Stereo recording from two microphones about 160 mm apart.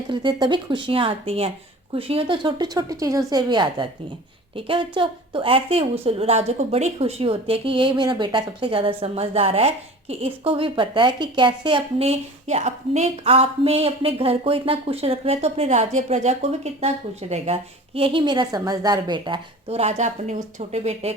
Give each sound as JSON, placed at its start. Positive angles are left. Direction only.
{"t": 0.1, "sound": "a woman's voice", "side_deg": -30}